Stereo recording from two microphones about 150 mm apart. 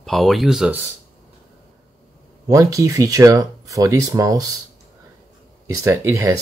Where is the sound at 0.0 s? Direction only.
Centre (ahead or behind).